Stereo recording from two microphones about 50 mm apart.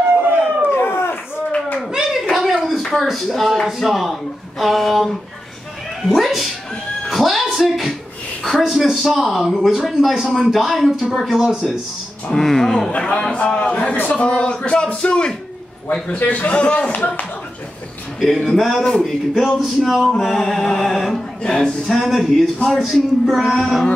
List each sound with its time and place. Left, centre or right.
0.1 s howl: right
0.7 s a sound: left
1.9 s a sound: centre
3.1 s speech: centre
7.1 s music: centre
8.5 s speech: centre
12.4 s mantra: centre
12.9 s speech: left
16.2 s speech: left
16.9 s speech: left
18.2 s speech: centre
20.1 s mantra: centre
21.4 s mantra: centre
21.8 s speech: centre